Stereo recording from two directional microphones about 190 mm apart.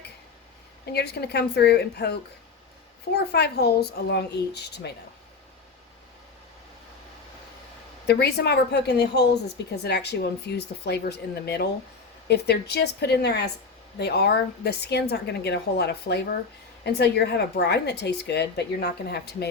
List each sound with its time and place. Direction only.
0.9 s a woman's voice: 60° left (ahead or behind)
3.3 s a woman's voice: 60° left (ahead or behind)
8.0 s a woman's voice: 60° left (ahead or behind)